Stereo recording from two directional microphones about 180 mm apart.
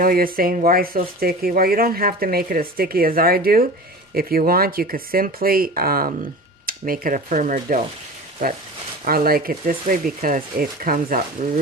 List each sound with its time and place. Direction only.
0.0 s speech: 55° right (ahead or behind)
9.0 s speech: 55° right (ahead or behind)